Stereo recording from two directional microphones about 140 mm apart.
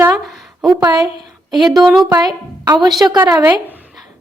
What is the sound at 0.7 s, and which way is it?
Speech, 25° right (ahead or behind).